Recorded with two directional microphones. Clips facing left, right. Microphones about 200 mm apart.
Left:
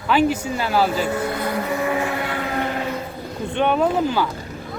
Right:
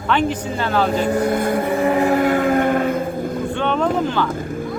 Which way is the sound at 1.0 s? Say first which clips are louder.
Right 5 dB; 40° right (ahead or behind).